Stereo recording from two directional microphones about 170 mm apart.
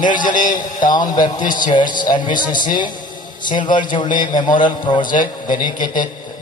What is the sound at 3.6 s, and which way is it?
A man's voice, 25° left (ahead or behind).